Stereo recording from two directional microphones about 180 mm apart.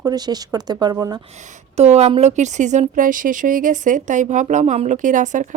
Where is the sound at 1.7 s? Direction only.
35° right (ahead or behind).